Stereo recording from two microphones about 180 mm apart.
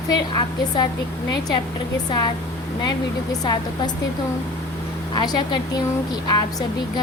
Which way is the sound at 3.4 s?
25° left (ahead or behind).